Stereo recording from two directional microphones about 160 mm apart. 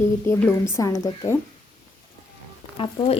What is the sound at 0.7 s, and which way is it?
Speech, 20° left (ahead or behind).